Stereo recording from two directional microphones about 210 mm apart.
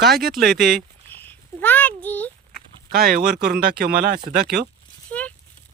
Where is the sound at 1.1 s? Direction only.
10° left (ahead or behind).